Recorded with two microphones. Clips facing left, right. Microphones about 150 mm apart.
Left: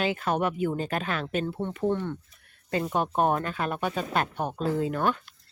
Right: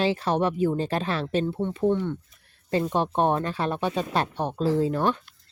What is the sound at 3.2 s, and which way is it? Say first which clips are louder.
Speech: right 1 dB; 30° right (ahead or behind).